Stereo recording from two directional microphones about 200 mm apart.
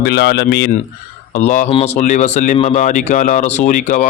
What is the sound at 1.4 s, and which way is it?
Speech, 35° left (ahead or behind).